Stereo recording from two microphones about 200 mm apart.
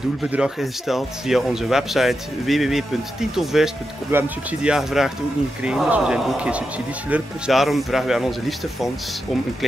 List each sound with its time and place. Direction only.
0.2 s speech: 5° right (ahead or behind)